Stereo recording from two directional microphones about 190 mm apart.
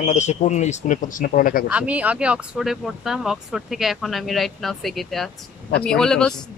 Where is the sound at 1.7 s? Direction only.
5° right (ahead or behind).